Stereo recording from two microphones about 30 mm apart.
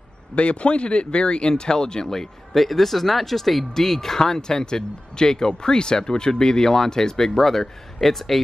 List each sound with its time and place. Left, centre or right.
0.4 s speech: left
1.5 s speech: left
2.0 s speech: centre